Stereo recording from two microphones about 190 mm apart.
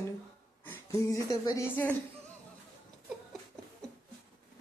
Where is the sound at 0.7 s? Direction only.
15° left (ahead or behind).